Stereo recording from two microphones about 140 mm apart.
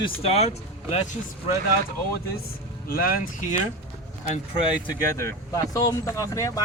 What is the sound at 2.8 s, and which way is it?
Speech, 90° left.